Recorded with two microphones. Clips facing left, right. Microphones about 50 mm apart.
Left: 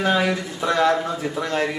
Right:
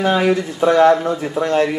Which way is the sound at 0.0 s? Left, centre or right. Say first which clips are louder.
Right 5 dB; centre.